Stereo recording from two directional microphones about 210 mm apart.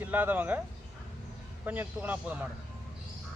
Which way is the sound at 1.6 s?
10° right (ahead or behind).